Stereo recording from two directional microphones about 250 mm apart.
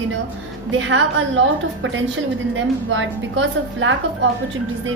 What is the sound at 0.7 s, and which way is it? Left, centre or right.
Speech, right.